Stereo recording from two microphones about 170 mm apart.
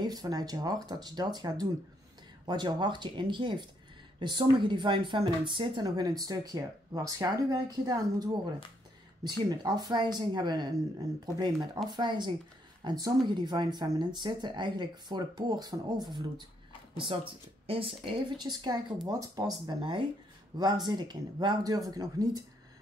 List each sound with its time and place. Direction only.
0.0 s speech: 20° right (ahead or behind)